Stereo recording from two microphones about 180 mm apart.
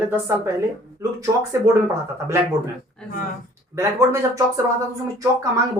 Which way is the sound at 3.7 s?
15° right (ahead or behind).